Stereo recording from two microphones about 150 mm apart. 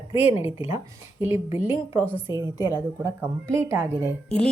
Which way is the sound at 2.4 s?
30° left (ahead or behind).